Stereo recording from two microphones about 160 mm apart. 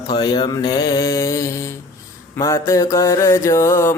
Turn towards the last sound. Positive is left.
turn(degrees=15)  # may be behind; listen again after turning